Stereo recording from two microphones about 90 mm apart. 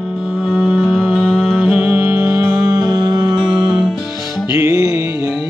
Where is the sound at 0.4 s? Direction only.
Centre (ahead or behind).